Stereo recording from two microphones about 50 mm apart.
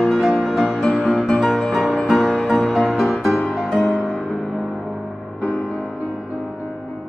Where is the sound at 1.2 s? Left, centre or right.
Centre.